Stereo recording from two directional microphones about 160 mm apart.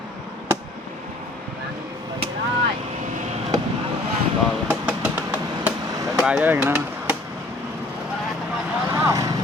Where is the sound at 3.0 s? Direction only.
50° right (ahead or behind).